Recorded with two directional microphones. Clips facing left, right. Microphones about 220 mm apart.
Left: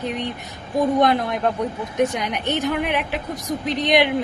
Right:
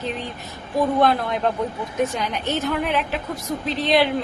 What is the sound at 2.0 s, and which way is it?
Speech, 15° left (ahead or behind).